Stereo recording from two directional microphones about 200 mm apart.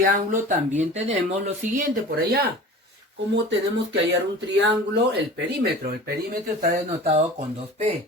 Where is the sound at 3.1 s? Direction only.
65° right (ahead or behind).